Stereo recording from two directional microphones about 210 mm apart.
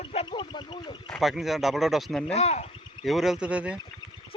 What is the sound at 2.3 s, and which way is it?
Speech, 30° left (ahead or behind).